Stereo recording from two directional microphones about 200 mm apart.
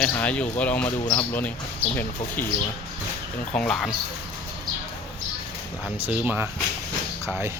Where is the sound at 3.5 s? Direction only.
5° left (ahead or behind).